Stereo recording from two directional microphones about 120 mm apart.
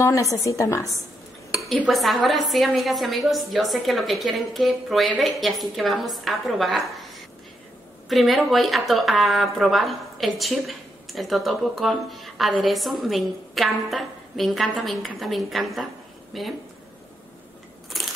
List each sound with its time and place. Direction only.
0.0 s a woman's voice: 25° left (ahead or behind)
1.7 s speech: centre (ahead or behind)
8.1 s speech: centre (ahead or behind)
17.9 s crushing: centre (ahead or behind)